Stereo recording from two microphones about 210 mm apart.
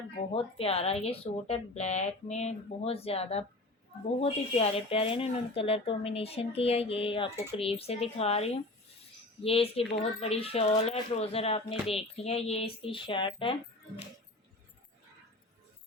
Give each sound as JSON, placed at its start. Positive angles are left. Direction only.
{"t": 0.3, "sound": "speech", "side_deg": 25}